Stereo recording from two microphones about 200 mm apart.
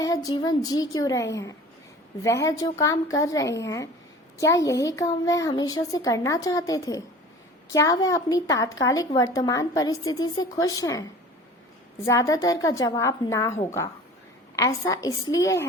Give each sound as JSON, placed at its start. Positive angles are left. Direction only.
{"t": 0.0, "sound": "a woman's voice", "side_deg": 20}
{"t": 12.0, "sound": "a woman's voice", "side_deg": 15}